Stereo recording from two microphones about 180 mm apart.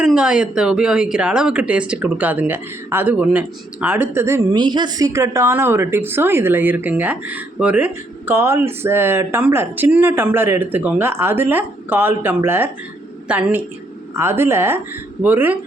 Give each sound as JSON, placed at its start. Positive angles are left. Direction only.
{"t": 0.0, "sound": "speech", "side_deg": -5}